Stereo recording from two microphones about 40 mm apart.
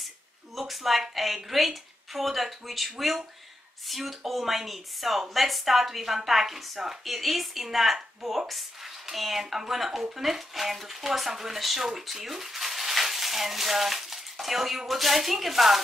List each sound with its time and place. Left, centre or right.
0.6 s a woman's voice: centre